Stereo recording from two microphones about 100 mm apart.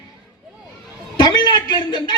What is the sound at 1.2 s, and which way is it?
Speech, 45° left (ahead or behind).